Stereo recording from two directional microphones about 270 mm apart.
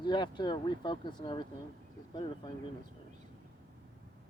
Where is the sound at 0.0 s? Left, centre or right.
Centre.